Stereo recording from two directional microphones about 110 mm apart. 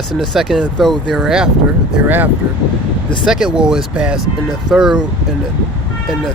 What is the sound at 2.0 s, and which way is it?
Speech, 15° right (ahead or behind).